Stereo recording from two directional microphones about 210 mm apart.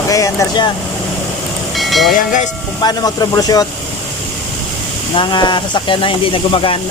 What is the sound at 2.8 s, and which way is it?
Speech, 20° left (ahead or behind).